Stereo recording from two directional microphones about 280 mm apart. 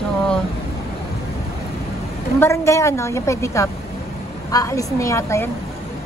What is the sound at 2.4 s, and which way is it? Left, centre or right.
A woman's voice, centre.